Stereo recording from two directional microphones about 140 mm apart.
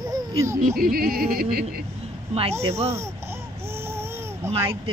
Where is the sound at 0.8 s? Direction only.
90° right.